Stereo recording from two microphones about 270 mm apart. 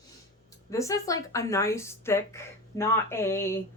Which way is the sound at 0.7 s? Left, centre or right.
Centre.